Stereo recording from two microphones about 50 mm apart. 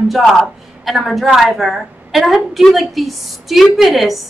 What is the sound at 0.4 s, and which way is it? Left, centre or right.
A woman's voice, centre.